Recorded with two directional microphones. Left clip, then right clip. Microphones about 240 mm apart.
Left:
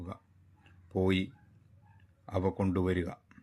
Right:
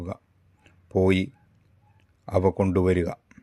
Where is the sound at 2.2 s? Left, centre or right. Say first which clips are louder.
Right 10 dB; right.